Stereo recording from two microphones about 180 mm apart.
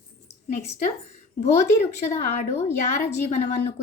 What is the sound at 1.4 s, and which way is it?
A woman's voice, 40° left (ahead or behind).